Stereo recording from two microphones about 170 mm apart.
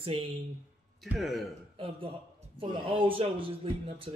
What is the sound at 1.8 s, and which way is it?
Speech, 35° right (ahead or behind).